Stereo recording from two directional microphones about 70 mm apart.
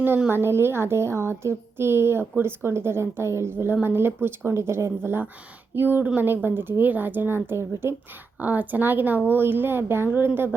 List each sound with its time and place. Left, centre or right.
0.3 s a woman's voice: right